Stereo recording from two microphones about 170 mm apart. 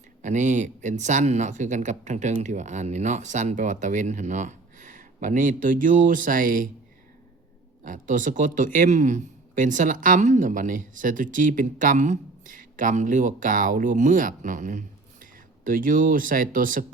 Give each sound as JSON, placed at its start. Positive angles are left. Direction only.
{"t": 0.2, "sound": "a man's voice", "side_deg": -45}
{"t": 7.9, "sound": "a man's voice", "side_deg": -50}